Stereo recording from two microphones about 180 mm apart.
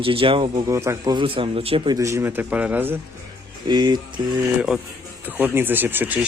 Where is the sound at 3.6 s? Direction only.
25° right (ahead or behind).